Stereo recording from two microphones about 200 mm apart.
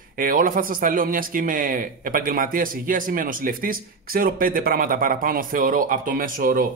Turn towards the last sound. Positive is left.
turn(degrees=-45)  # may be behind; listen again after turning